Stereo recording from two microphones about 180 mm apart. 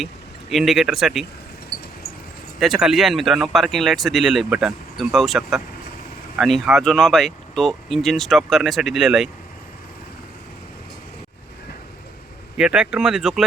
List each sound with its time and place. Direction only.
0.5 s speech: centre (ahead or behind)
1.7 s a sound: 60° left (ahead or behind)
2.6 s speech: 5° right (ahead or behind)
12.5 s speech: 5° right (ahead or behind)